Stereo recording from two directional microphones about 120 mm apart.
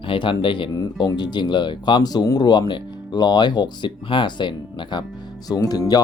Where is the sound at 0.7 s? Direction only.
30° left (ahead or behind).